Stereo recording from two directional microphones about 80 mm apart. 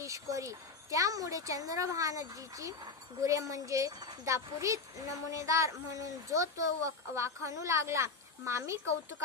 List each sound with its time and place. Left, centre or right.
0.0 s a woman's voice: right